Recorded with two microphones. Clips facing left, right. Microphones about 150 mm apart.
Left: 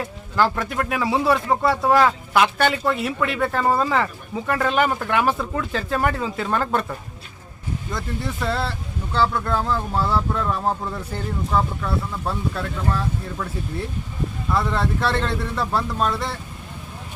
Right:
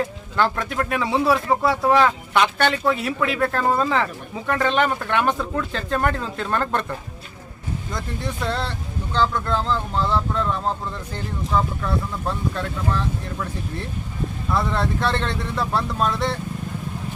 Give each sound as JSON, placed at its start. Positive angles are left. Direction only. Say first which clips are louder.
{"t": 0.3, "sound": "speech", "louder": "left 1 dB", "side_deg": 0}
{"t": 7.9, "sound": "speech", "louder": "left 1 dB", "side_deg": 0}
{"t": 14.5, "sound": "speech", "louder": "even", "side_deg": 0}